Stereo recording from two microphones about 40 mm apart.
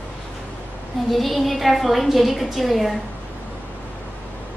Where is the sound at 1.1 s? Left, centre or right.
Centre.